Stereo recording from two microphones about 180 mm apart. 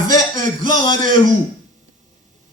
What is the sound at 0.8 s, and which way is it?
Speech, 25° left (ahead or behind).